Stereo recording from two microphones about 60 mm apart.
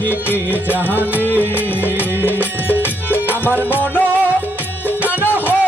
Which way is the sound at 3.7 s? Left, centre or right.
Left.